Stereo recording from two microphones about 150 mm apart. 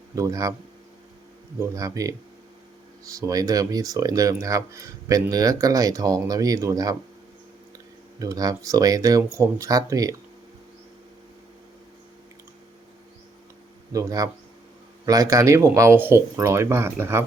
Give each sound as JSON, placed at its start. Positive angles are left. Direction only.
{"t": 0.2, "sound": "speech", "side_deg": -20}
{"t": 1.6, "sound": "speech", "side_deg": -20}
{"t": 8.2, "sound": "speech", "side_deg": -25}
{"t": 13.9, "sound": "speech", "side_deg": -25}